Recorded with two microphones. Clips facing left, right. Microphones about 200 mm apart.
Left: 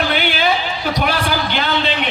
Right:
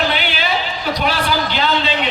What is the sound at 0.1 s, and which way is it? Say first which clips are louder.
Basketball bounce: left 4 dB; 50° left (ahead or behind).